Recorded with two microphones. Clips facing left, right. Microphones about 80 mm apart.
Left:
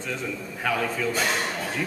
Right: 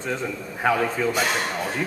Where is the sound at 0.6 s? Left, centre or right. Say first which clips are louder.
Right 5 dB; right.